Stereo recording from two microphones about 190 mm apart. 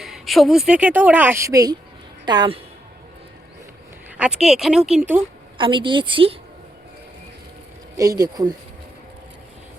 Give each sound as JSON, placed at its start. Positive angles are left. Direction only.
{"t": 0.0, "sound": "a woman's voice", "side_deg": 0}
{"t": 4.4, "sound": "speech", "side_deg": 0}
{"t": 5.5, "sound": "a woman's voice", "side_deg": -25}
{"t": 7.9, "sound": "a woman's voice", "side_deg": -20}